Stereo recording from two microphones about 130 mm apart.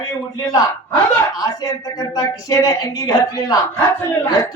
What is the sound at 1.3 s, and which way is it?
A woman's voice, 30° left (ahead or behind).